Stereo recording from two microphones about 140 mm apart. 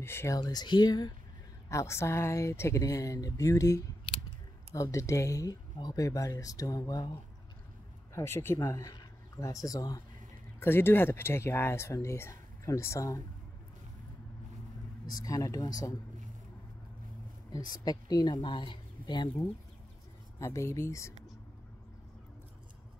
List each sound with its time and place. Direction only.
0.0 s speech: 15° left (ahead or behind)
0.4 s speech: 30° left (ahead or behind)
4.1 s scissors: 40° left (ahead or behind)
4.7 s speech: 20° left (ahead or behind)
8.1 s speech: 20° left (ahead or behind)
10.6 s speech: 15° left (ahead or behind)
15.2 s speech: 25° left (ahead or behind)
17.5 s speech: 30° left (ahead or behind)
20.3 s speech: 20° left (ahead or behind)